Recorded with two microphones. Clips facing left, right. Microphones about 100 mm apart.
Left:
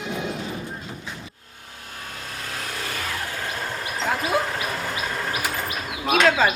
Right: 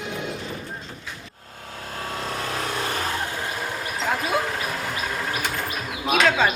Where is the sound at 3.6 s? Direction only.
10° right (ahead or behind).